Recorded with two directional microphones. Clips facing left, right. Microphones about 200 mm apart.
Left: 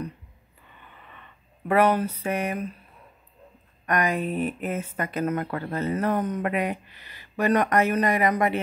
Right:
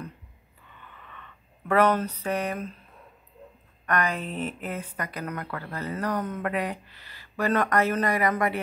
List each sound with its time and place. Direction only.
1.7 s speech: 10° left (ahead or behind)
3.8 s speech: 15° left (ahead or behind)